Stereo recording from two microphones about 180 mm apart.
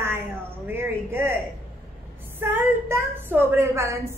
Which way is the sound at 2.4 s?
10° right (ahead or behind).